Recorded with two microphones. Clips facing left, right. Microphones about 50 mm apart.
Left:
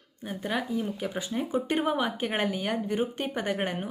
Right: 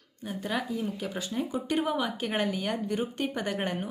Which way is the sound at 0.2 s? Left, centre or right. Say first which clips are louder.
Left 1 dB; centre.